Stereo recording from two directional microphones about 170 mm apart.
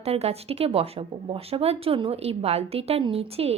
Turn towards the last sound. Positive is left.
turn(degrees=-35)  # may be behind; listen again after turning